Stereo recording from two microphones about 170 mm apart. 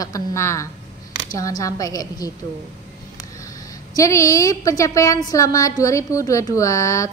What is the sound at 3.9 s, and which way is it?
A woman's voice, 20° left (ahead or behind).